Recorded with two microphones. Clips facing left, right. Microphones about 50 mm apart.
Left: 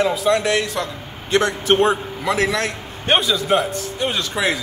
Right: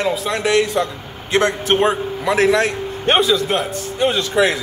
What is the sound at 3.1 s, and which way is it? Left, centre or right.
Speech, centre.